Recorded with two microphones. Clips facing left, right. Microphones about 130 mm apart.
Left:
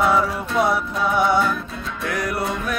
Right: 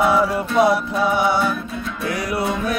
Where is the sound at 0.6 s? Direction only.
80° right.